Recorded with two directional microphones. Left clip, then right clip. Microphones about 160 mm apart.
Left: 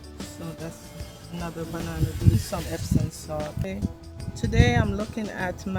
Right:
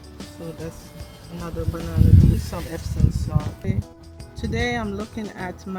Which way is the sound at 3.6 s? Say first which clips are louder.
Right 1 dB; 15° left (ahead or behind).